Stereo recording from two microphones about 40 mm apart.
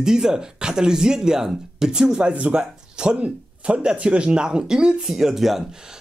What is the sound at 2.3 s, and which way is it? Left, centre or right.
Speech, right.